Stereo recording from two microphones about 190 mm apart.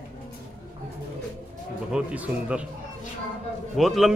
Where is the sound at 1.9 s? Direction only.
5° right (ahead or behind).